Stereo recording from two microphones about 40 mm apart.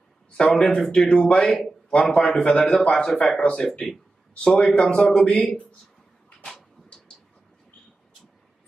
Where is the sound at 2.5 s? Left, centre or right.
Centre.